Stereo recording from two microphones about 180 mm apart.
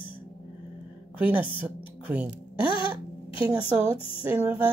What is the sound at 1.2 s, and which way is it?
Speech, 10° right (ahead or behind).